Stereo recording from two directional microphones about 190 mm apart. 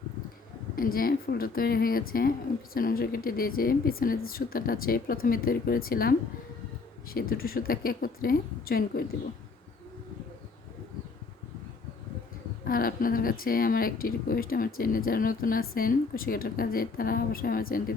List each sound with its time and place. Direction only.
0.8 s a woman's voice: 50° left (ahead or behind)
12.6 s a woman's voice: 50° left (ahead or behind)